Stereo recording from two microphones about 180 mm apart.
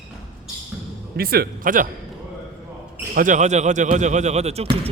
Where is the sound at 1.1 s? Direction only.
60° right (ahead or behind).